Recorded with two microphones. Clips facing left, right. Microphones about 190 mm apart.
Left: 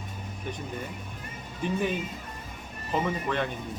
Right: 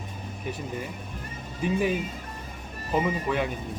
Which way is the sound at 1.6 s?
10° right (ahead or behind).